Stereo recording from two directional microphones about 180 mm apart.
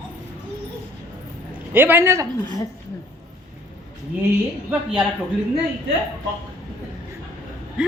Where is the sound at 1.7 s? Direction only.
10° right (ahead or behind).